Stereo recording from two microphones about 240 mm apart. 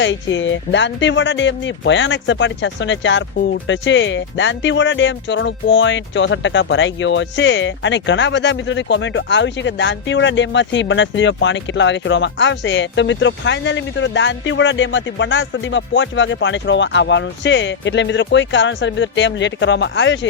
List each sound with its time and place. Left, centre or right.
0.0 s speech: left